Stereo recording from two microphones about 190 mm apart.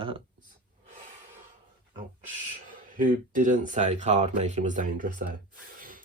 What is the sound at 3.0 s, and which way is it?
Speech, 45° right (ahead or behind).